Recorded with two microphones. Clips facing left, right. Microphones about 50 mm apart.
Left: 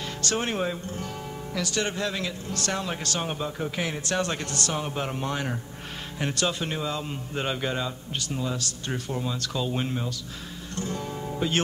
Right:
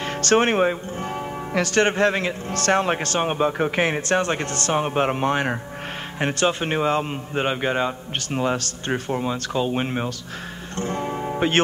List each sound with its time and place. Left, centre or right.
0.0 s speech: right
4.2 s speech: right
7.3 s speech: right
8.3 s speech: right
10.8 s music: right